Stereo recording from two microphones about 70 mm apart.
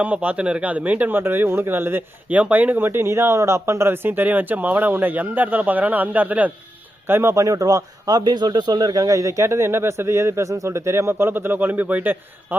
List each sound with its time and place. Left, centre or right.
0.0 s speech: right
2.3 s speech: right
7.1 s speech: right
7.3 s speech: right